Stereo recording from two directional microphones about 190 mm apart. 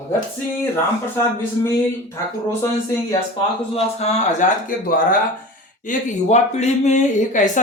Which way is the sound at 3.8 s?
35° left (ahead or behind).